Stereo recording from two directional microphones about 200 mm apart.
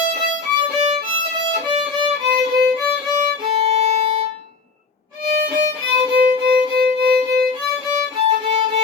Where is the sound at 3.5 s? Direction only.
30° right (ahead or behind).